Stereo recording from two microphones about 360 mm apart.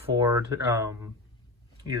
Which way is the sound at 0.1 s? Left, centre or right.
Centre.